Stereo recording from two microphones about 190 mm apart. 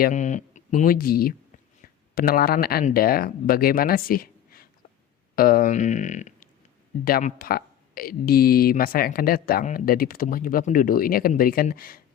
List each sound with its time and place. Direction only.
0.0 s speech: 40° left (ahead or behind)